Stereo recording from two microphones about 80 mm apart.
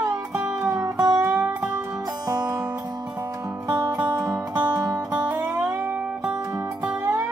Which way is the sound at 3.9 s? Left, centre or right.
Centre.